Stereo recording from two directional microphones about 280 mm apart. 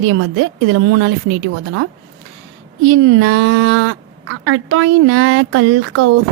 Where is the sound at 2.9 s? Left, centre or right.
Right.